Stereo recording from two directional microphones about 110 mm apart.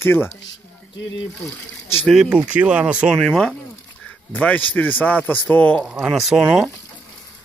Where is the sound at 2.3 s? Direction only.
15° right (ahead or behind).